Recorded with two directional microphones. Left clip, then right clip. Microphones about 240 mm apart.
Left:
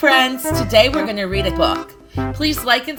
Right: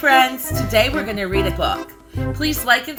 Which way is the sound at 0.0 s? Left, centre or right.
Left.